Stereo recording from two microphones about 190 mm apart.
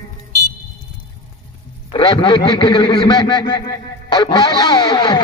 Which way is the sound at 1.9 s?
25° left (ahead or behind).